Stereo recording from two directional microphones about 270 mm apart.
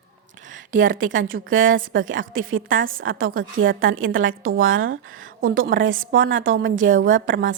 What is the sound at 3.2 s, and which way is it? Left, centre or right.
Speech, right.